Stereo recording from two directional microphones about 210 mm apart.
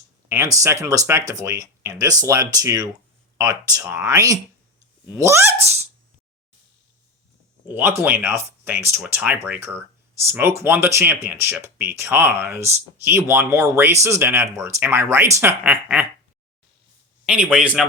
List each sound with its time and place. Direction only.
0.3 s speech: 15° right (ahead or behind)
7.7 s speech: 10° right (ahead or behind)
17.2 s speech: 5° right (ahead or behind)